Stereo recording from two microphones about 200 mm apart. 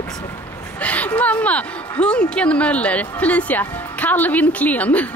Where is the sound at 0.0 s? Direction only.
15° left (ahead or behind).